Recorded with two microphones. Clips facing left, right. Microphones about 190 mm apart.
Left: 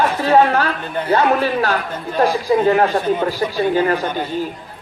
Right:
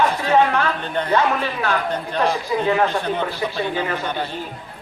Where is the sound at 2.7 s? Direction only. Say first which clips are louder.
Left 4 dB; 40° left (ahead or behind).